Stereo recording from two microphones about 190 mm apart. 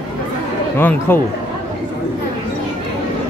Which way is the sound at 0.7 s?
10° left (ahead or behind).